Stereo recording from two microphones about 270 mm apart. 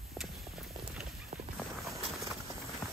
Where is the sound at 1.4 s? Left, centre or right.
Centre.